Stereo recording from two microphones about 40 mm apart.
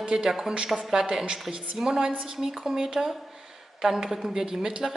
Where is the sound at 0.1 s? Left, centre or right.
Centre.